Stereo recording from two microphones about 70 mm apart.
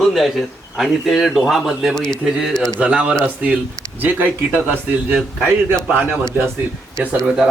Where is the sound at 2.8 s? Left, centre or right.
Centre.